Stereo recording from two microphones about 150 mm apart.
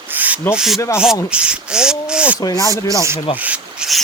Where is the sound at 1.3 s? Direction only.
5° right (ahead or behind).